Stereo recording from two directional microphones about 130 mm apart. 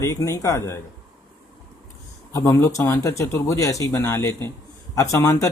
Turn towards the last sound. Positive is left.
turn(degrees=25)  # may be behind; listen again after turning